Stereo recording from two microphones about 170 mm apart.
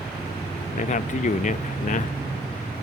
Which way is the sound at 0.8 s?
45° left (ahead or behind).